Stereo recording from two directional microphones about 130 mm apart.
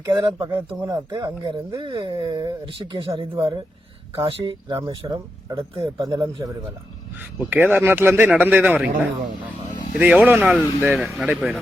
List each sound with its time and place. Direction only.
0.0 s speech: 35° right (ahead or behind)
4.1 s speech: 45° right (ahead or behind); by 6.5 s 30° right (ahead or behind)
7.3 s speech: 15° right (ahead or behind)